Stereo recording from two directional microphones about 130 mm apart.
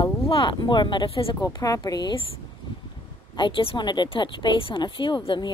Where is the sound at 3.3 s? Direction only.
40° left (ahead or behind).